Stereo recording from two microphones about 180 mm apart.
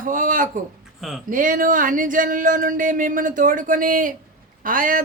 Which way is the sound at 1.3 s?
50° right (ahead or behind).